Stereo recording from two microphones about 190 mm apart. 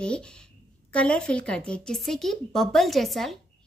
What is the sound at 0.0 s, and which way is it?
A woman's voice, 5° left (ahead or behind).